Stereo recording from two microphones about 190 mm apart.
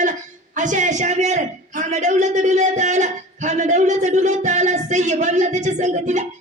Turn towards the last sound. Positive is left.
turn(degrees=-40)  # may be behind; listen again after turning